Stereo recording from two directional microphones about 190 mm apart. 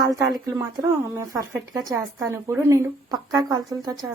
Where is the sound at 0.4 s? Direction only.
15° right (ahead or behind).